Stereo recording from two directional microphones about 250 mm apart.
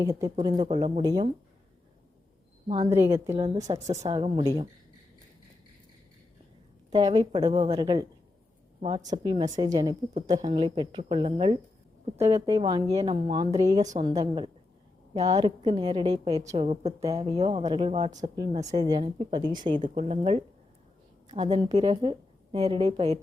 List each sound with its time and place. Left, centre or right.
0.0 s a woman's voice: centre
2.6 s a woman's voice: centre
6.9 s a woman's voice: centre
18.6 s a woman's voice: centre